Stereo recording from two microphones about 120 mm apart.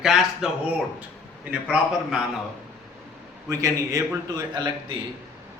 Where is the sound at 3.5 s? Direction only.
25° right (ahead or behind).